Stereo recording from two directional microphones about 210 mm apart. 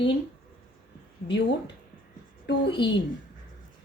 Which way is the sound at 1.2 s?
45° left (ahead or behind).